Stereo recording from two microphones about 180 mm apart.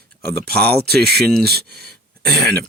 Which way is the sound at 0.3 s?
60° right (ahead or behind).